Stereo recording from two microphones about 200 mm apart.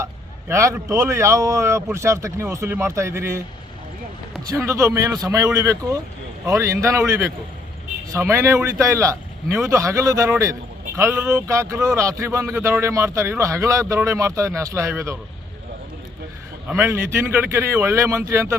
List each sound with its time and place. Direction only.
0.0 s speech: 15° right (ahead or behind)
4.4 s speech: 15° right (ahead or behind)
16.6 s speech: 10° right (ahead or behind)